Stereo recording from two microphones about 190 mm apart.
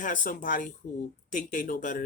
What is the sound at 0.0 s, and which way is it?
Speech, 45° left (ahead or behind).